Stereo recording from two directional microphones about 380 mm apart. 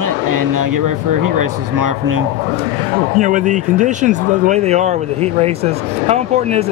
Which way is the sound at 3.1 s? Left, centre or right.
Centre.